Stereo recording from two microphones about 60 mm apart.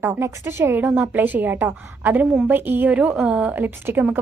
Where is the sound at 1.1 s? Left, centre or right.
Right.